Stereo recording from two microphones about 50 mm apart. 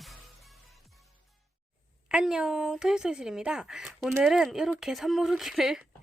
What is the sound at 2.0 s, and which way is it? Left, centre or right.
Speech, centre.